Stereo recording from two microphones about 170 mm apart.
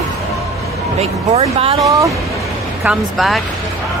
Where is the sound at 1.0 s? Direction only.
35° right (ahead or behind).